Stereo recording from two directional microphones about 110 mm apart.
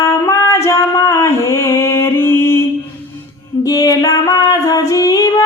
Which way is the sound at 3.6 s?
35° left (ahead or behind).